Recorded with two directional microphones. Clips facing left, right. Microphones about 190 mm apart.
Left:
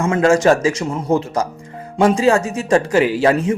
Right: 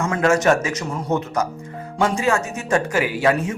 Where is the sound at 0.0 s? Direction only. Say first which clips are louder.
Left 4 dB; 30° left (ahead or behind).